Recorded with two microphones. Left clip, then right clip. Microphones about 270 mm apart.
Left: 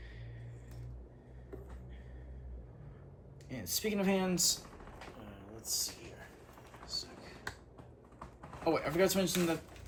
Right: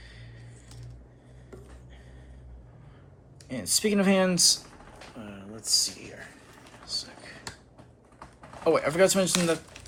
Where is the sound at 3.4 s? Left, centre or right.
Right.